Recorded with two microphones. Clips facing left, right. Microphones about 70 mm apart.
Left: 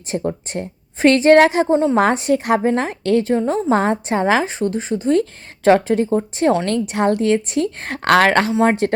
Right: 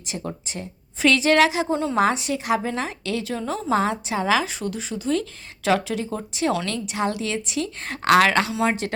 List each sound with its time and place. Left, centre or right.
0.1 s a woman's voice: left
0.5 s a woman's voice: left
1.7 s a woman's voice: left
2.0 s a woman's voice: left
3.3 s a woman's voice: left
6.7 s a woman's voice: left